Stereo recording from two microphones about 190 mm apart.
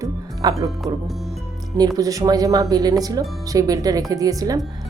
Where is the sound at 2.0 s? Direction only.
20° right (ahead or behind).